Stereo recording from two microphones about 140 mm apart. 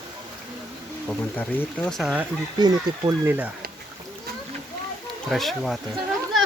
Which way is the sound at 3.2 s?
10° right (ahead or behind).